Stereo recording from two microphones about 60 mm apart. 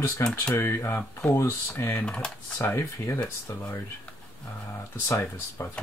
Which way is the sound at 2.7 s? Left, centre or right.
Left.